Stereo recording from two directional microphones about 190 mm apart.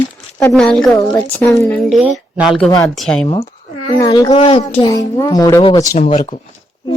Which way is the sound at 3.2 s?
30° left (ahead or behind).